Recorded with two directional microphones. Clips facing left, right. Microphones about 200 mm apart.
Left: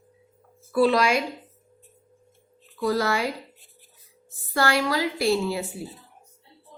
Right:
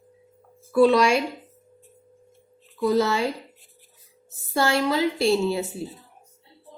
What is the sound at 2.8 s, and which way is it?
Speech, 20° right (ahead or behind).